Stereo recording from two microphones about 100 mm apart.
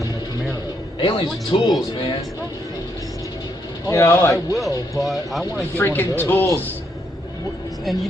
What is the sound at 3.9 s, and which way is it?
Speech, 30° left (ahead or behind).